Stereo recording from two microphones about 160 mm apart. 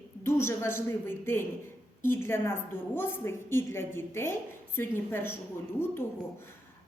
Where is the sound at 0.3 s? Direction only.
15° left (ahead or behind).